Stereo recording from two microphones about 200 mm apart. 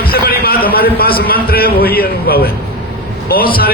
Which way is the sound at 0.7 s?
50° left (ahead or behind).